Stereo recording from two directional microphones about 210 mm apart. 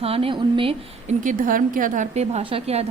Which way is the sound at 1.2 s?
40° right (ahead or behind).